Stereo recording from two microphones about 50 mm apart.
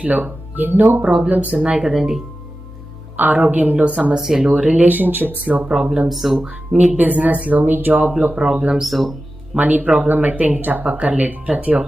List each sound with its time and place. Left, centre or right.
0.0 s speech: right
1.5 s speech: right
1.8 s speech: centre
3.2 s a woman's voice: right
4.2 s speech: centre; by 5.6 s right
5.6 s speech: centre
6.1 s speech: centre
6.5 s speech: right
8.2 s speech: right
8.8 s speech: centre
9.6 s speech: right